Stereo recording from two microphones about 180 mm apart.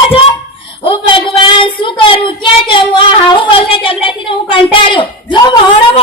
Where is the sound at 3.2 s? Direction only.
25° left (ahead or behind).